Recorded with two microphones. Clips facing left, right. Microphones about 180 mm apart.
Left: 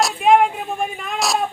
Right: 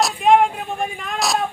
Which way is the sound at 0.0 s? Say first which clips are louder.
Even; centre (ahead or behind).